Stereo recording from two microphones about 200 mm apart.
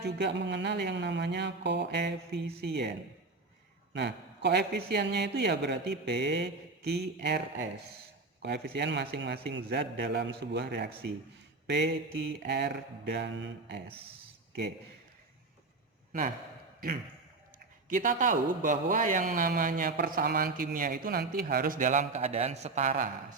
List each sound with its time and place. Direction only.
0.0 s a man's voice: 60° right (ahead or behind)
3.9 s a man's voice: 60° right (ahead or behind)
12.4 s a man's voice: 55° right (ahead or behind)
17.8 s a man's voice: 40° right (ahead or behind)